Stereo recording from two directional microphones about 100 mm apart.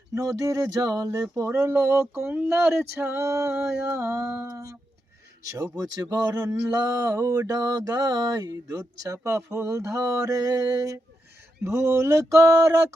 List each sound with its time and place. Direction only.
0.1 s speech: 30° right (ahead or behind)
1.3 s male singing: 25° right (ahead or behind)
5.5 s speech: 35° right (ahead or behind)
11.6 s male singing: 25° right (ahead or behind)